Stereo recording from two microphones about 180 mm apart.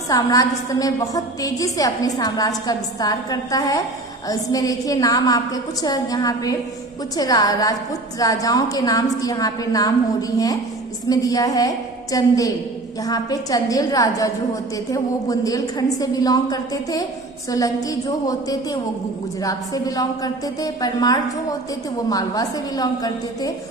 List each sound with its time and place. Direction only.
0.1 s a woman's voice: 20° left (ahead or behind)